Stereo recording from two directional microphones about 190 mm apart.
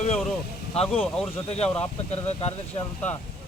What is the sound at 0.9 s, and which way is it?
Speech, 5° left (ahead or behind).